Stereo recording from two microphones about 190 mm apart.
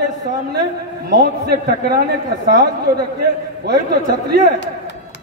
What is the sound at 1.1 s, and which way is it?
A man's voice, 60° right (ahead or behind).